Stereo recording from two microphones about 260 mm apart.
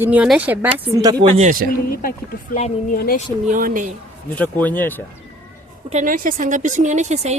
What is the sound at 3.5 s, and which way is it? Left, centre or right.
Speech, right.